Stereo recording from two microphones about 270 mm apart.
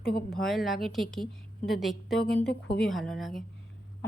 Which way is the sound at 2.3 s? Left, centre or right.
Left.